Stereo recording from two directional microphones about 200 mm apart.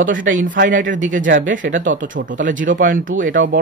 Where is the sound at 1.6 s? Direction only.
70° right (ahead or behind).